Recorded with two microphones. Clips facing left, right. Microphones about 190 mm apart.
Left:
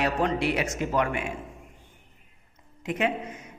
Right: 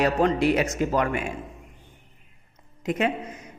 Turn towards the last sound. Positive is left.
turn(degrees=-40)  # may be behind; listen again after turning